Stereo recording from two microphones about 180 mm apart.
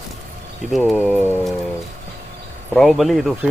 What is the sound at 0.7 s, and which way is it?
Speech, 10° right (ahead or behind).